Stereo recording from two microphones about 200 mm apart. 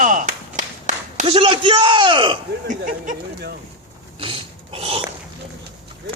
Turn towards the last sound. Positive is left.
turn(degrees=-30)  # may be behind; listen again after turning